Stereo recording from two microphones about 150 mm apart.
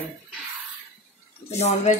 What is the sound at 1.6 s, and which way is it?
Cutlery, 45° left (ahead or behind).